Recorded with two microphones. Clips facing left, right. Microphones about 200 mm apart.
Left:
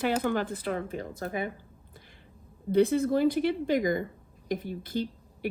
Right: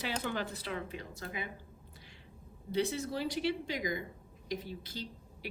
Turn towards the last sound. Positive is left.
turn(degrees=55)  # may be behind; listen again after turning